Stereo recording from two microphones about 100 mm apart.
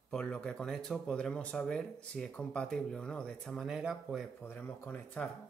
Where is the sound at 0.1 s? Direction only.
10° left (ahead or behind).